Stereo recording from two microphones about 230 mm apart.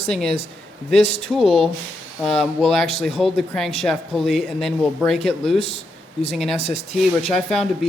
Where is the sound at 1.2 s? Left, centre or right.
Centre.